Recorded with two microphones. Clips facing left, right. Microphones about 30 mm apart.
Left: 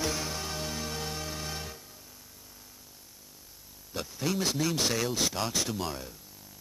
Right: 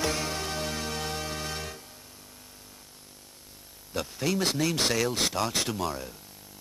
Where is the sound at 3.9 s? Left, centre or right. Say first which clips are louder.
Right 3 dB; centre.